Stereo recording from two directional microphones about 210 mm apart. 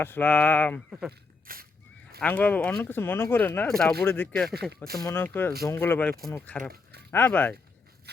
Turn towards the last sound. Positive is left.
turn(degrees=10)  # may be behind; listen again after turning